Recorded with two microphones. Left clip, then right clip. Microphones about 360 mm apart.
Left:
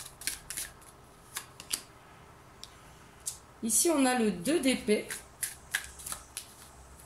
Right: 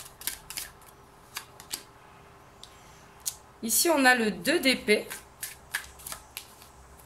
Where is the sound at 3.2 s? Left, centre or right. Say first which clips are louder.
Right 3 dB; right.